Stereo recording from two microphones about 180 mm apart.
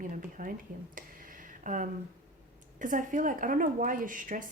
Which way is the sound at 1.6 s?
45° right (ahead or behind).